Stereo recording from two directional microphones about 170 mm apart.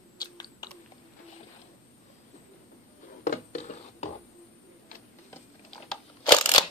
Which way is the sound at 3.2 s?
45° left (ahead or behind).